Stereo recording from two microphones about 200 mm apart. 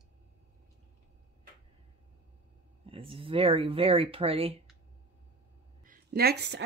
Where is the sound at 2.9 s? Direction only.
25° right (ahead or behind).